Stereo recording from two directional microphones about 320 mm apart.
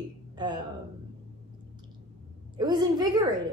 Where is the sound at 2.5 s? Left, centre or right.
Centre.